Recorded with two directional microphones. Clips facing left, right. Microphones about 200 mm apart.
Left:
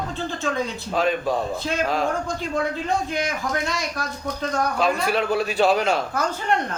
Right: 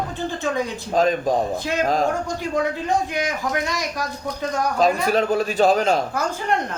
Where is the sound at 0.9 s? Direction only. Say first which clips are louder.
Right 3 dB; 40° right (ahead or behind).